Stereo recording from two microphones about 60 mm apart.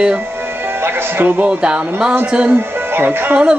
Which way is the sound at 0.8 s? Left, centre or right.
Right.